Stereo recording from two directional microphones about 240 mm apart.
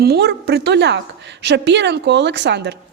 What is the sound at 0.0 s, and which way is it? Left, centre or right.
A woman's voice, right.